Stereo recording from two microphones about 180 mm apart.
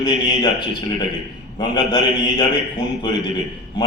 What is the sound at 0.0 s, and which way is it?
A man's voice, 25° left (ahead or behind).